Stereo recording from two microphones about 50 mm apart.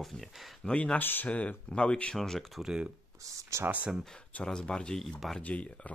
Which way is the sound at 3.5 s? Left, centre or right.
Right.